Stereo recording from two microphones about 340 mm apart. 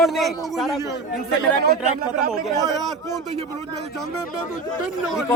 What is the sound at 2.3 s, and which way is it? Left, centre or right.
Speech, centre.